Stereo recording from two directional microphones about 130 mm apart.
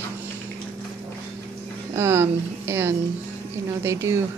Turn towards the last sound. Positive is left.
turn(degrees=-20)  # may be behind; listen again after turning